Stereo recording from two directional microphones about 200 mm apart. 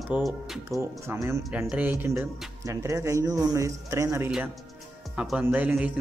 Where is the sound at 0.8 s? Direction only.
15° right (ahead or behind).